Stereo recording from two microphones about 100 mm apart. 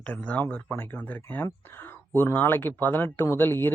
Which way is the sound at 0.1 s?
15° left (ahead or behind).